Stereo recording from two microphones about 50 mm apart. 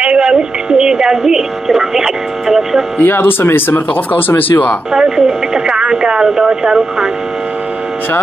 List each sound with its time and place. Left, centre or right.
0.0 s a sound: centre
3.0 s speech: left
4.9 s speech: centre